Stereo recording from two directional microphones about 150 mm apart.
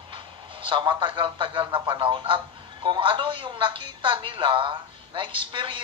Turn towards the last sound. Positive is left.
turn(degrees=-35)  # may be behind; listen again after turning